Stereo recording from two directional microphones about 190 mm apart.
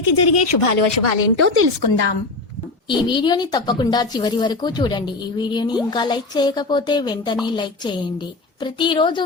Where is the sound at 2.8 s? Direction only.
25° left (ahead or behind).